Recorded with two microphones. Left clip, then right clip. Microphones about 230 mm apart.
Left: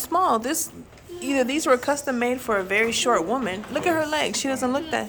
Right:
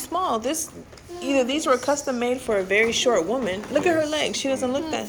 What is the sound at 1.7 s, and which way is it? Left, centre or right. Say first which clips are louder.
A woman's voice: left 1 dB; left.